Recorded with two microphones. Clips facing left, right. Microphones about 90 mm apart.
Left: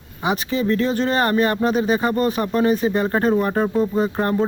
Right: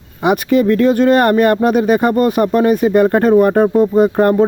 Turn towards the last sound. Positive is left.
turn(degrees=-45)  # may be behind; listen again after turning